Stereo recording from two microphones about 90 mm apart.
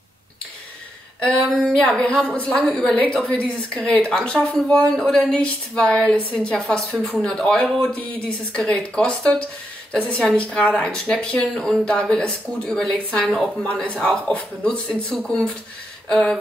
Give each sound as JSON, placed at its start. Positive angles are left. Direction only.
{"t": 2.0, "sound": "a woman's voice", "side_deg": 10}